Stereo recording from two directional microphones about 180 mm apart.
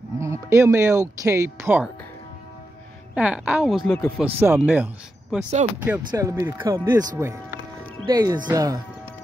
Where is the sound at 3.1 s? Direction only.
5° right (ahead or behind).